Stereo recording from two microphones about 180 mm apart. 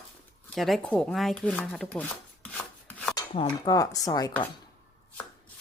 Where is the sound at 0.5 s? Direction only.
Centre (ahead or behind).